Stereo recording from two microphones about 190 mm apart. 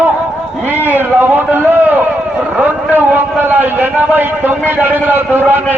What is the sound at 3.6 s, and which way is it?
A man's voice, 10° right (ahead or behind).